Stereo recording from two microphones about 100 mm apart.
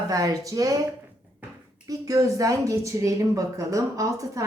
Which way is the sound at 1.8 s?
35° right (ahead or behind).